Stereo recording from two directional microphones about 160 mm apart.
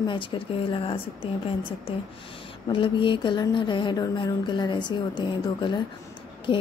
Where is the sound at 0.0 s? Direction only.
30° left (ahead or behind).